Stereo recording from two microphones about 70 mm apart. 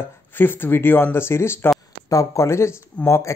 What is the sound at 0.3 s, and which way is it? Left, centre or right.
Speech, left.